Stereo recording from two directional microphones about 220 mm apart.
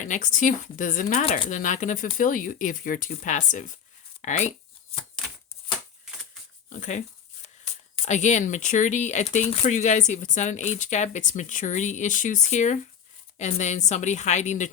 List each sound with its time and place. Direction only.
0.0 s speech: 35° left (ahead or behind)
1.2 s speech: 25° left (ahead or behind)
6.7 s speech: 35° left (ahead or behind)